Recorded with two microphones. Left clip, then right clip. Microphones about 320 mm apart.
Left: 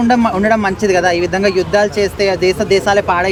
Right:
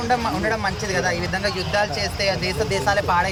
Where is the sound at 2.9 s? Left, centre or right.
Left.